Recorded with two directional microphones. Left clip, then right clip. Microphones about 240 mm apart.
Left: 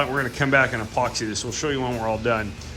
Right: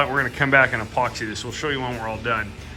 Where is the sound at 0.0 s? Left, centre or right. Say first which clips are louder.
Right 3 dB; centre.